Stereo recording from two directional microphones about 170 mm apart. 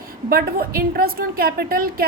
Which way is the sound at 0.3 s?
60° right (ahead or behind).